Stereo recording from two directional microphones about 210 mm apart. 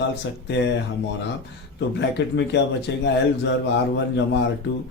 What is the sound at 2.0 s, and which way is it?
Speech, 55° left (ahead or behind).